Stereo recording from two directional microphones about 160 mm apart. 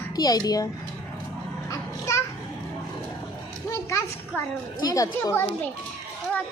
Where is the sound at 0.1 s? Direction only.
25° left (ahead or behind).